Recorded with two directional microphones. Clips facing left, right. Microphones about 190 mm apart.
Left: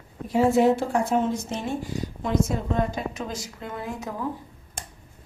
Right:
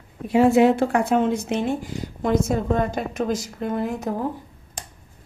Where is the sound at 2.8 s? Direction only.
55° right (ahead or behind).